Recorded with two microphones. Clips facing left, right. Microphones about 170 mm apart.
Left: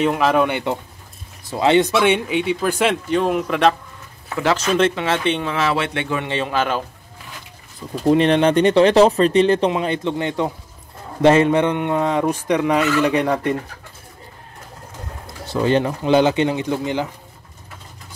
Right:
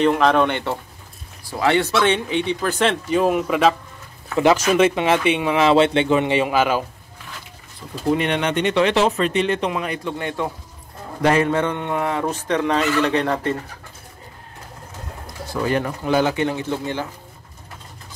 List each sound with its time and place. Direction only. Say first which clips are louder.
0.0 s fowl: right 1 dB; 5° left (ahead or behind)
1.4 s fowl: left 3 dB; 20° left (ahead or behind)
3.1 s speech: right 1 dB; 5° right (ahead or behind)
4.4 s speech: right 2 dB; 15° right (ahead or behind)
8.1 s speech: left 6 dB; 30° left (ahead or behind)
11.2 s fowl: left 4 dB; 20° left (ahead or behind)
15.5 s speech: left 4 dB; 25° left (ahead or behind)